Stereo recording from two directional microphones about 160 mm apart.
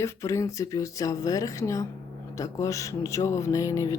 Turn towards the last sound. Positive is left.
turn(degrees=20)  # may be behind; listen again after turning